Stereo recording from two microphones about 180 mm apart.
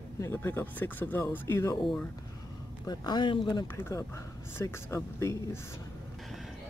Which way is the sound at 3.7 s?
15° left (ahead or behind).